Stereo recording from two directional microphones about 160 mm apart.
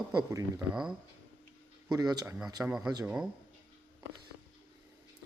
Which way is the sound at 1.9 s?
25° right (ahead or behind).